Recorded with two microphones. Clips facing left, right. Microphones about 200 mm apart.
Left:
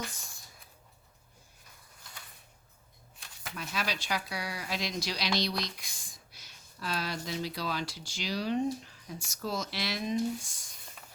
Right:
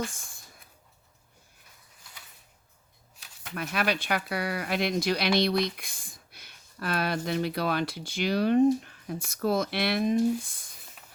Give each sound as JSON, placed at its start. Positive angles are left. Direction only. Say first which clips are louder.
{"t": 0.1, "sound": "speech", "louder": "even", "side_deg": -50}
{"t": 3.2, "sound": "a sound", "louder": "left 1 dB", "side_deg": 0}
{"t": 3.5, "sound": "speech", "louder": "right 7 dB", "side_deg": -60}